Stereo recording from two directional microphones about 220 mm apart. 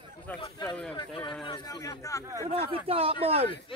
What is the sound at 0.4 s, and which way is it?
Speech, 15° left (ahead or behind).